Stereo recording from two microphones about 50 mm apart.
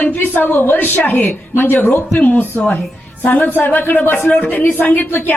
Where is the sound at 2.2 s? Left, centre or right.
Left.